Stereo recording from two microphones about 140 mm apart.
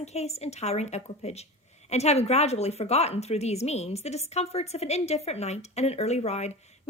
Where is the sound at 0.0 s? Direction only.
50° left (ahead or behind).